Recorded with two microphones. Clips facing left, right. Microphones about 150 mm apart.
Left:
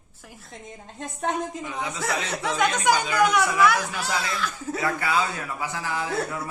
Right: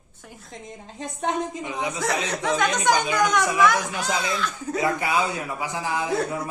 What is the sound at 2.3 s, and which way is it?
Speech, 5° left (ahead or behind).